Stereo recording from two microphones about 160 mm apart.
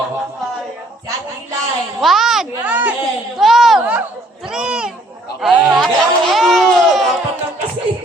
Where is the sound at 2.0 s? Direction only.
Centre (ahead or behind).